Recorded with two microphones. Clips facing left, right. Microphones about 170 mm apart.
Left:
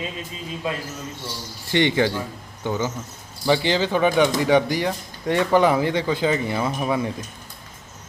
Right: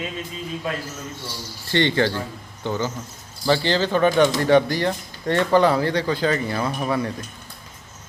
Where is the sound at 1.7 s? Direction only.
15° left (ahead or behind).